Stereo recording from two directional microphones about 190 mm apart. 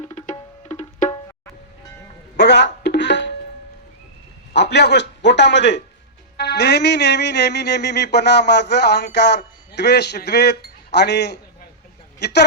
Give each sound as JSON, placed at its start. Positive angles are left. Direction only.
{"t": 0.0, "sound": "music", "side_deg": 30}
{"t": 2.3, "sound": "speech", "side_deg": 65}
{"t": 2.8, "sound": "music", "side_deg": 65}
{"t": 4.5, "sound": "music", "side_deg": 60}